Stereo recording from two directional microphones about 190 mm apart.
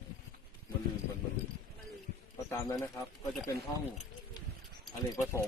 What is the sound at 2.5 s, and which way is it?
Speech, 15° left (ahead or behind).